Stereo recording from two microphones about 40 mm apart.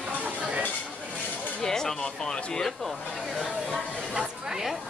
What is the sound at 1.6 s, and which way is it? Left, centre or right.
Speech, centre.